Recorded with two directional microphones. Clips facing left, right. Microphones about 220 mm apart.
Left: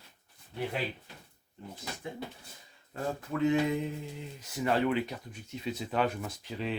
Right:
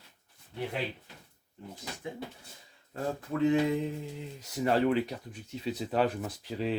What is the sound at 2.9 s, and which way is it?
Speech, 35° right (ahead or behind).